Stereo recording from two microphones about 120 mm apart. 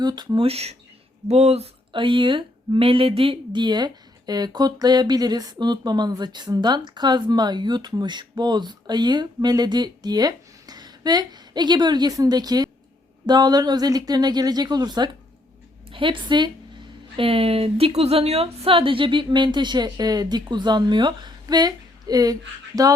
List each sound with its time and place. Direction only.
0.0 s speech: 35° right (ahead or behind)
0.3 s speech: 55° right (ahead or behind)
1.9 s a woman's voice: 45° right (ahead or behind)
17.2 s speech: 50° right (ahead or behind); by 22.9 s 30° right (ahead or behind)